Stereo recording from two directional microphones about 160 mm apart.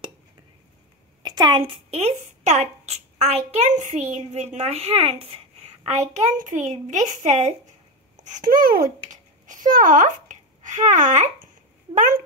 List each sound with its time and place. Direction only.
1.2 s speech: 25° right (ahead or behind); by 7.5 s 45° right (ahead or behind)
8.5 s a child's voice: 60° right (ahead or behind)